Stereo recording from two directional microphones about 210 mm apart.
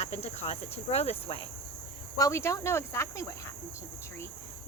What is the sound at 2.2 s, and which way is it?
Speech, 15° left (ahead or behind).